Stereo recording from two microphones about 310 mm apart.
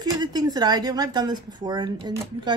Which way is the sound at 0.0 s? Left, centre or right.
Centre.